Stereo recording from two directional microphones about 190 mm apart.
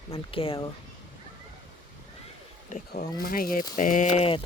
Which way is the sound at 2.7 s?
45° left (ahead or behind).